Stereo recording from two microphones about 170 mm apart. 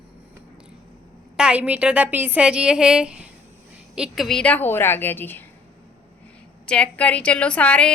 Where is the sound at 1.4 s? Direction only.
5° right (ahead or behind); by 5.4 s 10° left (ahead or behind).